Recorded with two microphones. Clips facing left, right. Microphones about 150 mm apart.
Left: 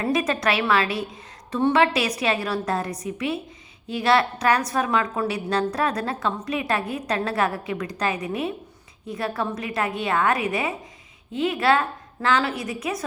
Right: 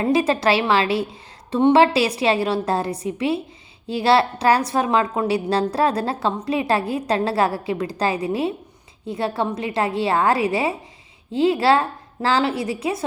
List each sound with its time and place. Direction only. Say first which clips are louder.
0.0 s a woman's voice: right 5 dB; 30° right (ahead or behind)